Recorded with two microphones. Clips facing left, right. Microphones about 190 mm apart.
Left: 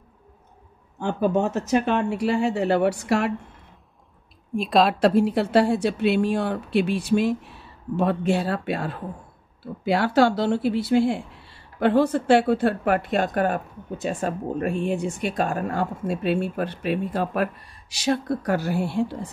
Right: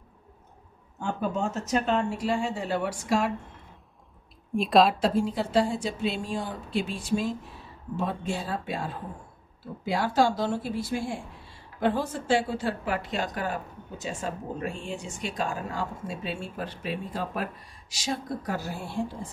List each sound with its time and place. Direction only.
0.9 s speech: 70° left (ahead or behind)
4.6 s speech: centre (ahead or behind)
5.0 s speech: 70° left (ahead or behind)